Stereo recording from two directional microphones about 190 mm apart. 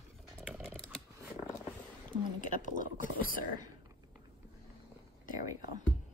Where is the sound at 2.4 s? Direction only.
40° left (ahead or behind).